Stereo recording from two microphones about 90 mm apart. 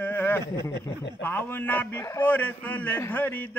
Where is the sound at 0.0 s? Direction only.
25° left (ahead or behind).